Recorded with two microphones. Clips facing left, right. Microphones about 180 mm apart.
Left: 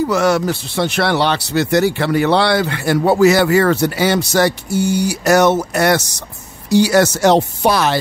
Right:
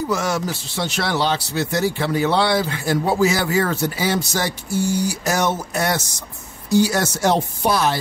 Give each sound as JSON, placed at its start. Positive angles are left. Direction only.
{"t": 0.1, "sound": "speech", "side_deg": 70}